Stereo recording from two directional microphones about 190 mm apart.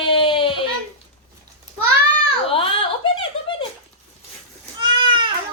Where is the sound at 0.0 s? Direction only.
25° left (ahead or behind).